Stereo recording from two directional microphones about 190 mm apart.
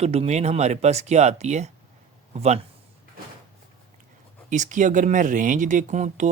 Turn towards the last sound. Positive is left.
turn(degrees=-40)  # may be behind; listen again after turning